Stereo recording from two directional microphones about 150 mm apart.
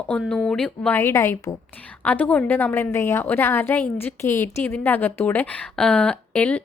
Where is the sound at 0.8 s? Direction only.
15° left (ahead or behind).